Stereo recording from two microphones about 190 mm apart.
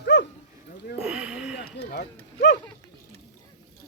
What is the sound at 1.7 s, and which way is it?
Speech, 60° left (ahead or behind).